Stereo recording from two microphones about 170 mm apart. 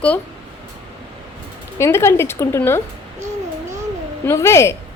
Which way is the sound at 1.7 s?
15° left (ahead or behind).